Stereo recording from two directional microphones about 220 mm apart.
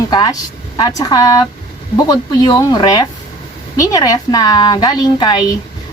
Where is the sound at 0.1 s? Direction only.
20° left (ahead or behind).